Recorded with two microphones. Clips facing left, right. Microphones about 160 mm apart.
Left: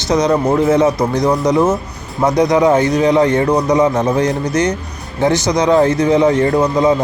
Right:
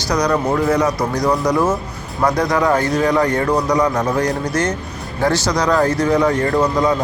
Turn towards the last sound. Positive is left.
turn(degrees=20)  # may be behind; listen again after turning